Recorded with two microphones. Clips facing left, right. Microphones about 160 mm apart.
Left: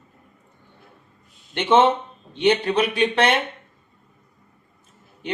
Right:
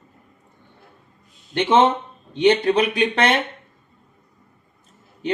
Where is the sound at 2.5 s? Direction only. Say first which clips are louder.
Right 2 dB; 40° right (ahead or behind).